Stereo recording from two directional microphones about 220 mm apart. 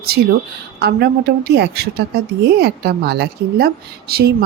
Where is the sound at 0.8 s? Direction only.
50° right (ahead or behind).